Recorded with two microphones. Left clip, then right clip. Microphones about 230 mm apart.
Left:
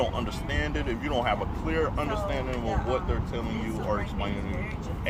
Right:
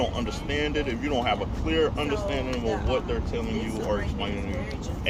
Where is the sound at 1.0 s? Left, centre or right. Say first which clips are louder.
Even; left.